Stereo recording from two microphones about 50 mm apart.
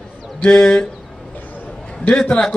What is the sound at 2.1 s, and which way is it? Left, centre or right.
Speech, centre.